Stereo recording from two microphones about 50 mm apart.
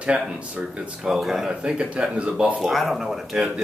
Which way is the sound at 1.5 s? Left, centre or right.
Right.